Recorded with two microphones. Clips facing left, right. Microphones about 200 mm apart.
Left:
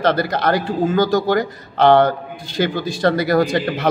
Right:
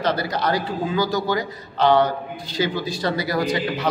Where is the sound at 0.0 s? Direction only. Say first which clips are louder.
Left 5 dB; 55° left (ahead or behind).